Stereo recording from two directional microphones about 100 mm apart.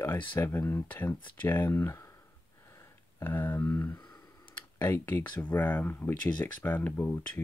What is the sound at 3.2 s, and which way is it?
Speech, 20° left (ahead or behind).